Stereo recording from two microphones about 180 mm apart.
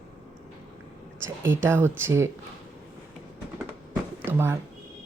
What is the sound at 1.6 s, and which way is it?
Speech, 15° right (ahead or behind).